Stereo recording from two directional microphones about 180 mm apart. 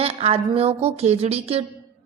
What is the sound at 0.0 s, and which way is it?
A woman's voice, 35° right (ahead or behind).